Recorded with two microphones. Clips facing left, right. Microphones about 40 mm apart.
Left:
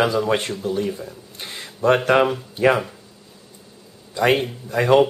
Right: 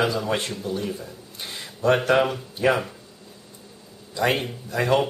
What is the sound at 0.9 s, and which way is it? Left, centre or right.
Speech, centre.